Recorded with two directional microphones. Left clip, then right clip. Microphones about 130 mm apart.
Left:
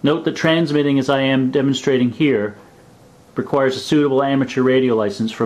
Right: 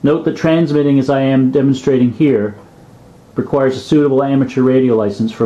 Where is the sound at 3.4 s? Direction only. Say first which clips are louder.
Right 3 dB; 30° left (ahead or behind).